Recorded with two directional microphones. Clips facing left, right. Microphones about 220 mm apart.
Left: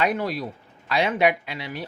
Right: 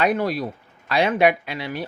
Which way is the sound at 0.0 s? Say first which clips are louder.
Right 3 dB; 60° right (ahead or behind).